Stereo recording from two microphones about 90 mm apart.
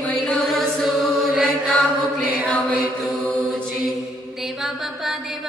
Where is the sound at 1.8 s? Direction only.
15° right (ahead or behind).